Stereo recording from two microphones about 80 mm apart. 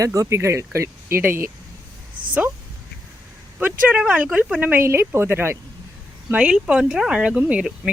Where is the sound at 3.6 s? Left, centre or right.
Centre.